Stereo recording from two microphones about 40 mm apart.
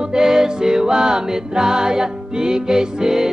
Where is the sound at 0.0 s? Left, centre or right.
Centre.